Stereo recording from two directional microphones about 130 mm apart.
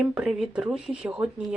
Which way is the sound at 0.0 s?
5° right (ahead or behind).